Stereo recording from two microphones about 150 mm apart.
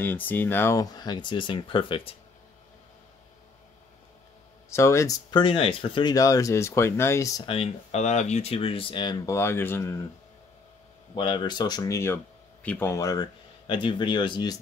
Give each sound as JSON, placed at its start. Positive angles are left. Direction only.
{"t": 0.0, "sound": "speech", "side_deg": 15}
{"t": 4.6, "sound": "speech", "side_deg": 20}
{"t": 5.3, "sound": "speech", "side_deg": 35}
{"t": 6.1, "sound": "speech", "side_deg": 25}
{"t": 7.4, "sound": "speech", "side_deg": 40}
{"t": 11.1, "sound": "speech", "side_deg": 30}